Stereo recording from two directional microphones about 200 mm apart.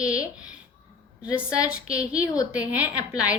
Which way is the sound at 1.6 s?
5° right (ahead or behind).